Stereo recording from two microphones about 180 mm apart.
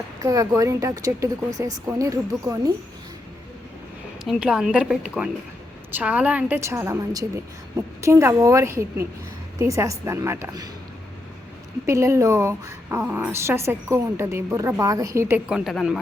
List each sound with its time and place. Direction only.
0.2 s speech: 20° right (ahead or behind)
4.2 s a woman's voice: 5° right (ahead or behind)
11.9 s speech: 15° right (ahead or behind); by 16.0 s centre (ahead or behind)